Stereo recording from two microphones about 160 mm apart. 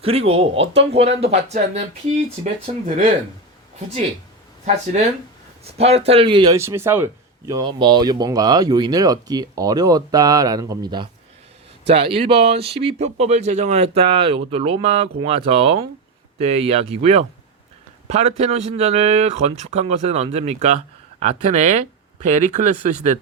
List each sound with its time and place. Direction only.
0.0 s speech: 35° right (ahead or behind)
5.7 s a man's voice: 40° right (ahead or behind)